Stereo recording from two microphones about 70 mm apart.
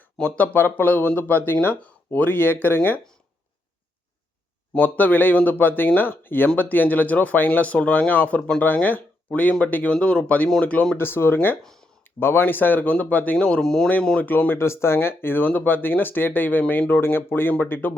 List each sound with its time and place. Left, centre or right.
0.2 s speech: left
4.7 s speech: left
10.9 s speech: left
13.4 s speech: centre
14.2 s speech: left